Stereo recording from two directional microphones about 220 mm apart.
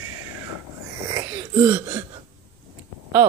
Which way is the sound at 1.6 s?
10° right (ahead or behind).